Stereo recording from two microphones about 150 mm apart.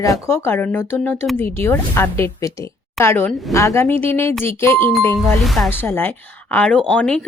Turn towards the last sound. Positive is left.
turn(degrees=5)  # may be behind; listen again after turning